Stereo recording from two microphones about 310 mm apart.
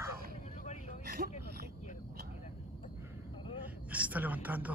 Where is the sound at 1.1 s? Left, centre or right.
Right.